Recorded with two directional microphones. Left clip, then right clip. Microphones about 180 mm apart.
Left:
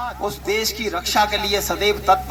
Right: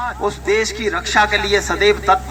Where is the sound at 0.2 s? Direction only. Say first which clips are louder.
Right 5 dB; 35° left (ahead or behind).